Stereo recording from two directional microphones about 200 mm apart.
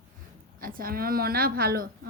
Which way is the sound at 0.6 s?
45° right (ahead or behind).